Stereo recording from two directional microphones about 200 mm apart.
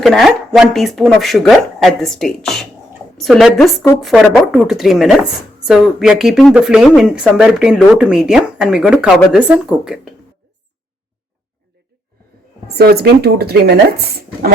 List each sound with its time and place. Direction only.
0.0 s speech: centre (ahead or behind)
12.6 s speech: 50° right (ahead or behind)